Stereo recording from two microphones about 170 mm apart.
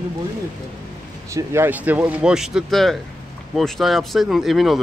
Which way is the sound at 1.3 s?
15° right (ahead or behind).